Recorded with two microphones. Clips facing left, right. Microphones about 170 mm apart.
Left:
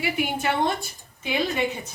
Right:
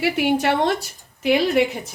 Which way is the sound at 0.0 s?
75° right (ahead or behind).